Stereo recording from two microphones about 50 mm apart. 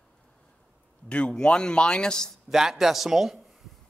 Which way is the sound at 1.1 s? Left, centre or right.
Left.